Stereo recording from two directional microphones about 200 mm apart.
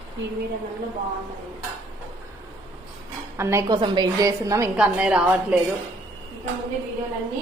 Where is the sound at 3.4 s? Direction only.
15° right (ahead or behind).